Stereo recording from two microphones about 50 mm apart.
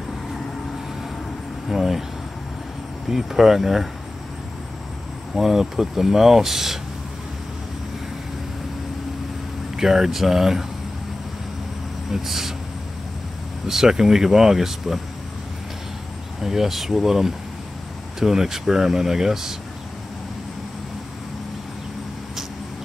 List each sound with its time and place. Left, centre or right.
1.7 s speech: centre
3.1 s speech: centre
5.3 s speech: centre
9.8 s speech: centre
12.1 s speech: centre
13.7 s speech: centre
16.3 s speech: centre